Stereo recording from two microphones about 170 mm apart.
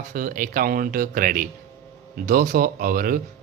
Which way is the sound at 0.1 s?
50° right (ahead or behind).